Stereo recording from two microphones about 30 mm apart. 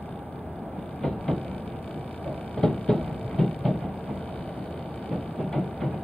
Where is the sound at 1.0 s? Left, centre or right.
Centre.